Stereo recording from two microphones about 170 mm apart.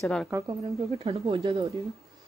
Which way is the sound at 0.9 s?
35° right (ahead or behind).